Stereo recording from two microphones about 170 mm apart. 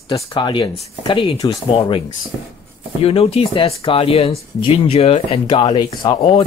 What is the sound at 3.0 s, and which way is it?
Speech, 35° left (ahead or behind).